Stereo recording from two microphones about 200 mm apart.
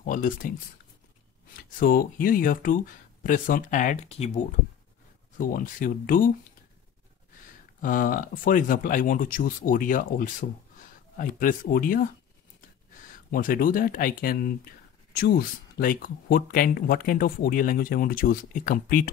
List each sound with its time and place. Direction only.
0.0 s speech: 45° left (ahead or behind)
1.6 s speech: 45° left (ahead or behind)
7.8 s speech: 45° left (ahead or behind)
13.3 s speech: 45° left (ahead or behind)